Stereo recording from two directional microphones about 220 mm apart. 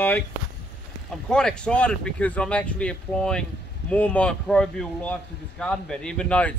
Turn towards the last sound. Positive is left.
turn(degrees=5)  # may be behind; listen again after turning